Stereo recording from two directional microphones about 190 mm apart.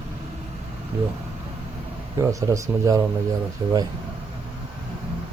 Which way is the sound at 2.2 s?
15° right (ahead or behind).